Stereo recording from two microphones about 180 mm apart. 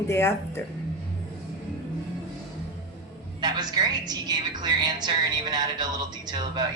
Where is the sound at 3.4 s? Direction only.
25° right (ahead or behind).